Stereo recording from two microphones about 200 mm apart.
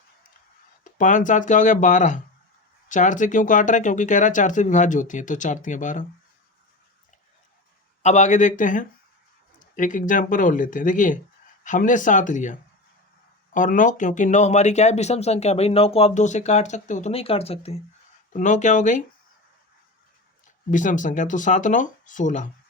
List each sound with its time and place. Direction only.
0.9 s speech: 40° left (ahead or behind)
8.0 s speech: 35° left (ahead or behind)
20.7 s speech: 40° left (ahead or behind)